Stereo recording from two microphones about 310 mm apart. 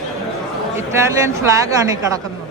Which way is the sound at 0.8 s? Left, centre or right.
Centre.